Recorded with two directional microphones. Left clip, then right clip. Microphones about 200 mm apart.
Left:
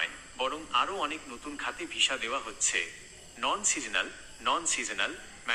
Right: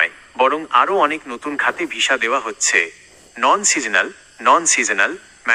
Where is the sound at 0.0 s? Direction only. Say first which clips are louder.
Right 16 dB; 35° right (ahead or behind).